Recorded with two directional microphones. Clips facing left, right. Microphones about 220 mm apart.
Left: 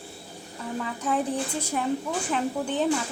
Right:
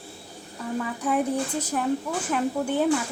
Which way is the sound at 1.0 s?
10° right (ahead or behind).